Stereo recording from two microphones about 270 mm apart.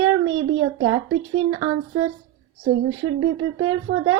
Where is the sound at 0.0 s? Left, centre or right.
Right.